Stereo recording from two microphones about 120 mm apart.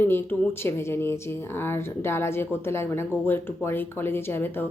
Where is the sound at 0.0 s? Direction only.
20° left (ahead or behind).